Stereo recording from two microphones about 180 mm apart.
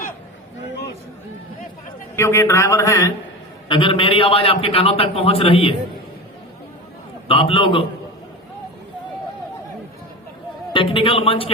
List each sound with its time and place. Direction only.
2.1 s a man's voice: 15° left (ahead or behind)
3.7 s a man's voice: 30° left (ahead or behind)
7.3 s a man's voice: 30° left (ahead or behind)
10.7 s speech: 30° left (ahead or behind)